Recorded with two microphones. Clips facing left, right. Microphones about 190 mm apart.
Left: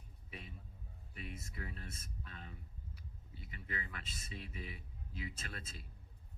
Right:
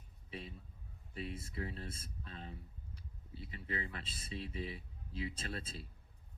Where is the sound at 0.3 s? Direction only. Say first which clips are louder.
Right 5 dB; 30° right (ahead or behind).